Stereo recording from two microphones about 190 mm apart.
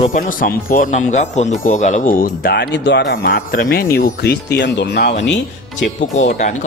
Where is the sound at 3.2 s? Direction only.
50° left (ahead or behind).